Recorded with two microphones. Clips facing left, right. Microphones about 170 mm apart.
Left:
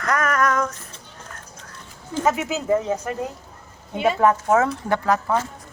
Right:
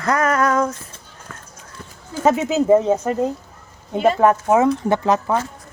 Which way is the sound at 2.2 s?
25° right (ahead or behind).